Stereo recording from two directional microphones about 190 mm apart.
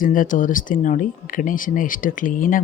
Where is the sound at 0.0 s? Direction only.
45° left (ahead or behind).